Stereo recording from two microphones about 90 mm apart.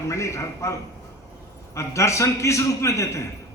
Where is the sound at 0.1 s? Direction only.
35° left (ahead or behind).